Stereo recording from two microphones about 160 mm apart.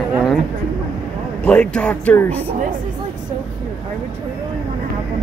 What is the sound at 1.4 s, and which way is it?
Speech, 5° left (ahead or behind).